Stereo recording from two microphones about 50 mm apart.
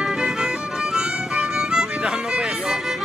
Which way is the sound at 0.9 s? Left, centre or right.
Centre.